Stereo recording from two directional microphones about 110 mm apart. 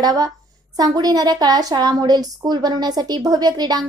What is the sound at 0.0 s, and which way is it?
A woman's voice, 35° right (ahead or behind).